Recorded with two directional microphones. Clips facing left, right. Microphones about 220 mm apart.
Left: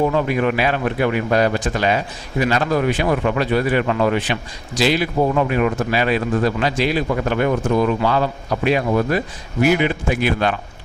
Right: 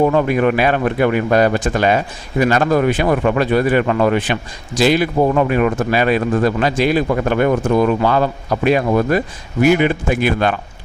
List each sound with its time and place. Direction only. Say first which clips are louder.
0.0 s speech: right 4 dB; 55° right (ahead or behind)